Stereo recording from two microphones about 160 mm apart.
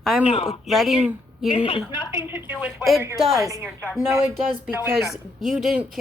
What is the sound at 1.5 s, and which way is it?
Speech, 35° left (ahead or behind).